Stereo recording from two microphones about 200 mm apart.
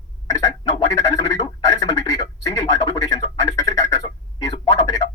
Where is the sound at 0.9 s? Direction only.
15° left (ahead or behind).